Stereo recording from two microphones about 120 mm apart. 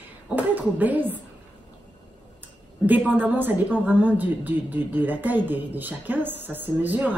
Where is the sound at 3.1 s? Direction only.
15° right (ahead or behind).